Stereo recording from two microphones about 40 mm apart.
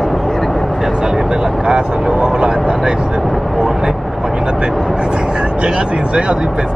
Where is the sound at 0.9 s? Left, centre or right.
Centre.